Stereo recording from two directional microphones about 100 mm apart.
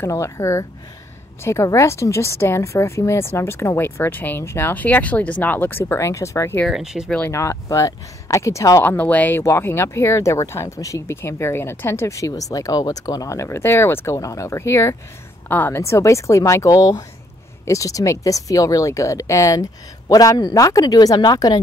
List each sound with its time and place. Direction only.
0.0 s speech: 30° left (ahead or behind)
6.7 s speech: 5° right (ahead or behind)
7.2 s speech: 30° left (ahead or behind)
8.8 s speech: 15° left (ahead or behind)
9.4 s speech: 25° left (ahead or behind)